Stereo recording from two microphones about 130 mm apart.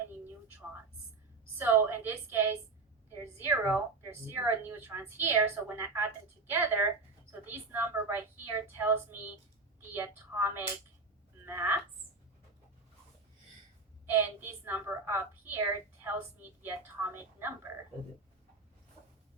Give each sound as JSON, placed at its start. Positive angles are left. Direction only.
{"t": 1.5, "sound": "a woman's voice", "side_deg": -15}
{"t": 14.1, "sound": "a woman's voice", "side_deg": -15}